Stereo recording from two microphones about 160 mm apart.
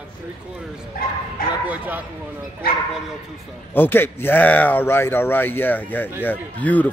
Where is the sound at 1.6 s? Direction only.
10° right (ahead or behind).